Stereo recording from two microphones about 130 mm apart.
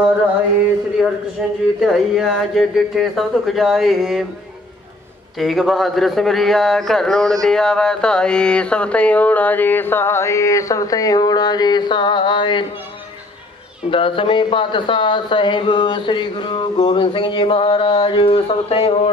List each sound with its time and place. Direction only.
1.0 s a man's voice: centre (ahead or behind)
5.4 s speech: centre (ahead or behind); by 12.6 s 40° left (ahead or behind)
13.8 s speech: 40° left (ahead or behind)